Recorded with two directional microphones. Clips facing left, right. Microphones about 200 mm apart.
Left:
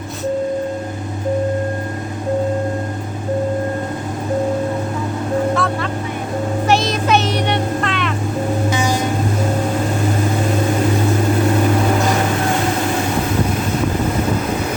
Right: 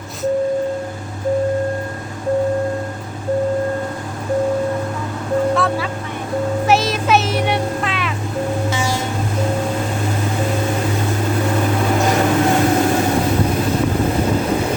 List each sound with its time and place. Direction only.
5.5 s vehicle: 5° right (ahead or behind)
8.7 s music: 15° left (ahead or behind)